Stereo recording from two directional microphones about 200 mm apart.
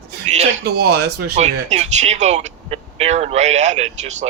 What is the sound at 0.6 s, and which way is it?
Speech, 50° right (ahead or behind).